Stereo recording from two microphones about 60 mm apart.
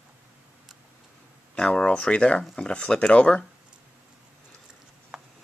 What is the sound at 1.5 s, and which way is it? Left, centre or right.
Speech, centre.